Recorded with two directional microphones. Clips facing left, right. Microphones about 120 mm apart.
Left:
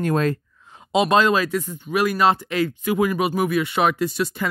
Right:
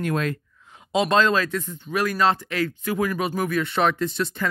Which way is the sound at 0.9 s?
15° left (ahead or behind).